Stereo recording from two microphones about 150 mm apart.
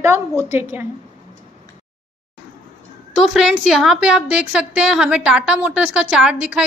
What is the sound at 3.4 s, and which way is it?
A woman's voice, 5° right (ahead or behind).